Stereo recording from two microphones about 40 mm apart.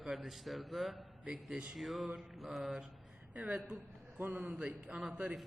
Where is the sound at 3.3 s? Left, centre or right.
Right.